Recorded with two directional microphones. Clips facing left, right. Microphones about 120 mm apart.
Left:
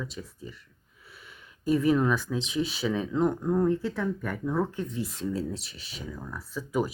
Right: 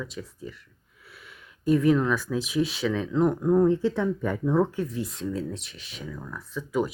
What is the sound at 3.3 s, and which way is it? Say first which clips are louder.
Speech: right 4 dB; 15° right (ahead or behind).